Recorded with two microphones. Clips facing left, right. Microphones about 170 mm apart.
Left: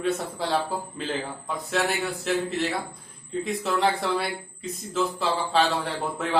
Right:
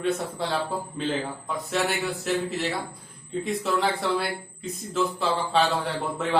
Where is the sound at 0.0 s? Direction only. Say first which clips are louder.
Even; centre (ahead or behind).